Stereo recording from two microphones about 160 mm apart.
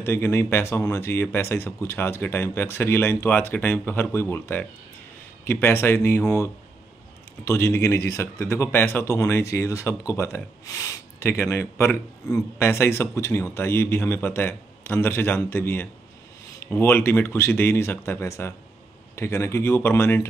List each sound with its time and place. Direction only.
0.0 s speech: 15° left (ahead or behind)